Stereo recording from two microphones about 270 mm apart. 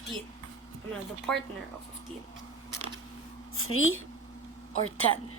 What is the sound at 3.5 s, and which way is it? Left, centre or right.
Speech, left.